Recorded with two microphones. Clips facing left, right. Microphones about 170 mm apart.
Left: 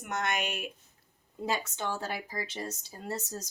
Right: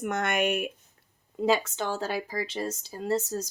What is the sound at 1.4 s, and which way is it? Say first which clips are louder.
Speech: right 7 dB; 90° right.